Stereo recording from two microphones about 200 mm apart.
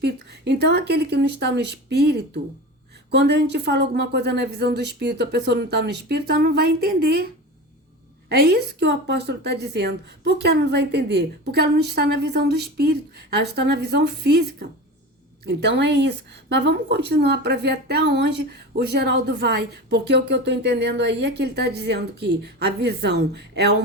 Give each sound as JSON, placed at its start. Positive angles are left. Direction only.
{"t": 0.0, "sound": "a woman's voice", "side_deg": -55}
{"t": 8.3, "sound": "a woman's voice", "side_deg": -55}